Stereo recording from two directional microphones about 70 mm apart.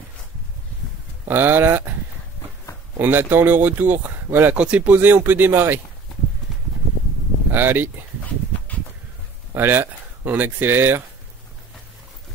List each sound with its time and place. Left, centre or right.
1.2 s speech: right
3.0 s speech: right
7.5 s speech: right
9.5 s speech: right